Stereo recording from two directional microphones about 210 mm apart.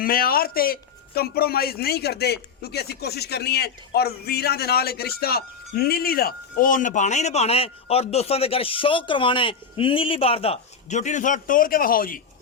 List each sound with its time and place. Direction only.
0.0 s a man's voice: 45° left (ahead or behind)